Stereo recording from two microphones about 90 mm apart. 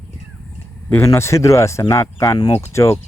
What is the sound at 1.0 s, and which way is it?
Speech, 35° left (ahead or behind).